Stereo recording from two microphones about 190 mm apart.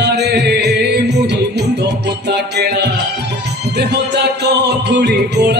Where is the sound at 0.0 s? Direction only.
60° right (ahead or behind).